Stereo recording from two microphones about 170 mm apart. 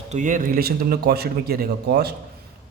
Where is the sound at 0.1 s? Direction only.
45° right (ahead or behind); by 2.1 s 65° right (ahead or behind).